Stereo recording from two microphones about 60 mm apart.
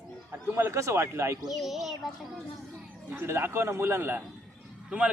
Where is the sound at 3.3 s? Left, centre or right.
Right.